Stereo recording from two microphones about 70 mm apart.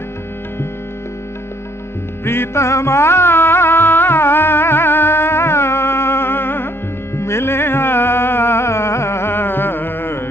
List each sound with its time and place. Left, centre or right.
2.2 s music: left